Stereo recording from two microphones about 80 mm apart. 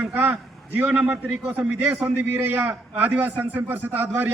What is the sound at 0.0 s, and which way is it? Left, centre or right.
A man's voice, centre.